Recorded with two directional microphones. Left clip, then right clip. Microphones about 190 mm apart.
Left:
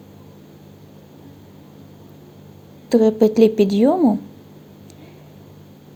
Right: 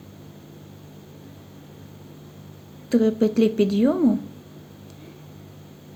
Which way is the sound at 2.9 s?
25° left (ahead or behind).